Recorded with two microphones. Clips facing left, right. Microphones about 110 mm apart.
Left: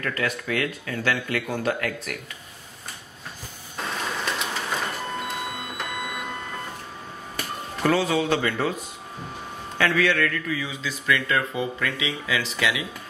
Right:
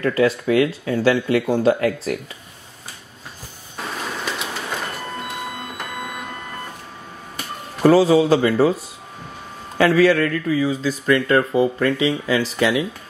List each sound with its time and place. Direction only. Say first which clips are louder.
0.0 s speech: right 10 dB; 25° right (ahead or behind)
4.0 s printer: right 1 dB; centre (ahead or behind)
7.8 s speech: right 9 dB; 35° right (ahead or behind)